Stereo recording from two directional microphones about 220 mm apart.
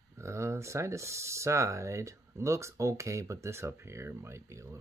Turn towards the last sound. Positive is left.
turn(degrees=-15)  # may be behind; listen again after turning